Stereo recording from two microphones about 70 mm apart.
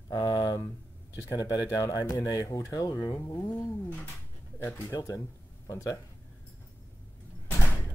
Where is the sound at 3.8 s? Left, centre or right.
Left.